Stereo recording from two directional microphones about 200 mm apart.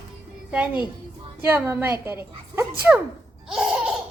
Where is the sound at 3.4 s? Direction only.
Centre (ahead or behind).